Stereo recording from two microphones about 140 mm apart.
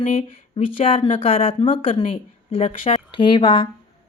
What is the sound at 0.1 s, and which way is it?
A woman's voice, 45° left (ahead or behind).